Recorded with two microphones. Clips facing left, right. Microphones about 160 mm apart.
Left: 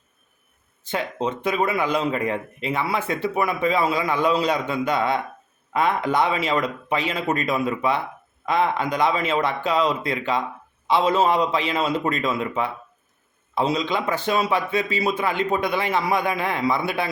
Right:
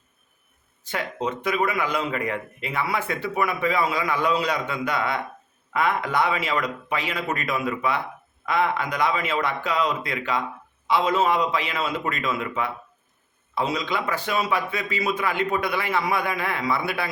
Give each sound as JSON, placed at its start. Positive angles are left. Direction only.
{"t": 0.9, "sound": "speech", "side_deg": 25}